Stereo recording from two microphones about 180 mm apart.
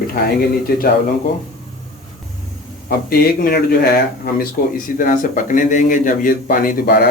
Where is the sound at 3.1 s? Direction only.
55° left (ahead or behind).